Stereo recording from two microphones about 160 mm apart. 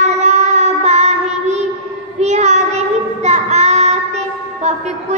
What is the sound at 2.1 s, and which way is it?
Child singing, 45° right (ahead or behind).